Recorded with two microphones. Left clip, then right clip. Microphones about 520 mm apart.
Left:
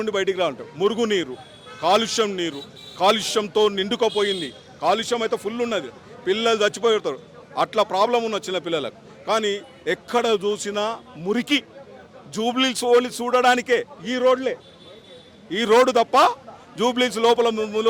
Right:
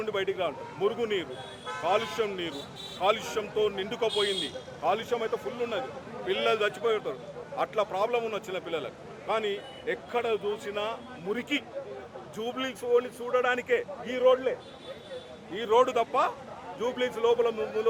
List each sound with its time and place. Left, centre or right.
0.0 s a man's voice: left
15.5 s speech: left
16.8 s speech: left